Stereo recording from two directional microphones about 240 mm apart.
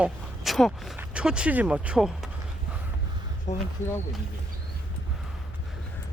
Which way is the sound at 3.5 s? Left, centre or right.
Left.